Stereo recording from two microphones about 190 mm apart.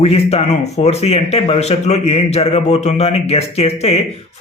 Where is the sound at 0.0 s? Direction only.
30° left (ahead or behind).